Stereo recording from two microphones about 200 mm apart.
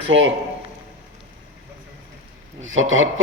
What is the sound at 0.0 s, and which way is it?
Speech, 65° right (ahead or behind).